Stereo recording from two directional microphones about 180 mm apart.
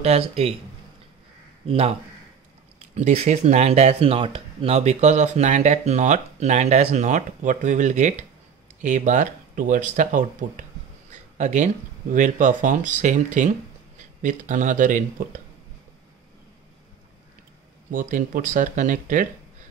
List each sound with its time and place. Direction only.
0.0 s speech: 35° right (ahead or behind)
1.7 s speech: 35° right (ahead or behind)
17.9 s speech: 50° right (ahead or behind)